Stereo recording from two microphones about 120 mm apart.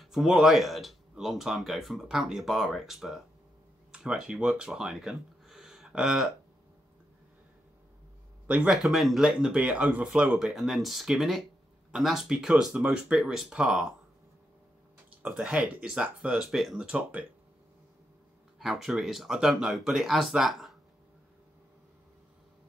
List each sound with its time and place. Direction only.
0.0 s speech: centre (ahead or behind)
8.5 s speech: 10° right (ahead or behind)
8.8 s speech: centre (ahead or behind)
15.0 s speech: 10° right (ahead or behind)
18.6 s speech: 5° right (ahead or behind)